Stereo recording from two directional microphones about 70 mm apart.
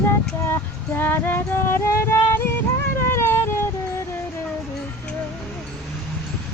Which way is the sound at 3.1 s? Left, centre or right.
Left.